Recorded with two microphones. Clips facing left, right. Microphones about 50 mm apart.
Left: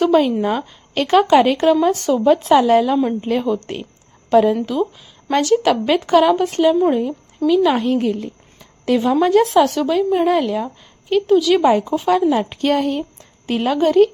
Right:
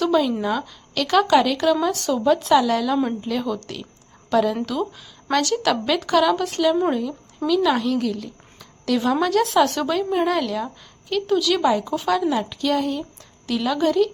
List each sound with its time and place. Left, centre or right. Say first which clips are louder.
0.0 s a woman's voice: left 5 dB; left
4.6 s a woman's voice: left 5 dB; centre
9.6 s a woman's voice: left 4 dB; centre
11.6 s speech: left 5 dB; left
11.9 s a woman's voice: left 5 dB; left
12.4 s a woman's voice: left 4 dB; left